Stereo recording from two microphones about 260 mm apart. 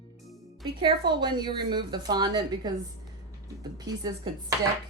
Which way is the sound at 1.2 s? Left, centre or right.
Centre.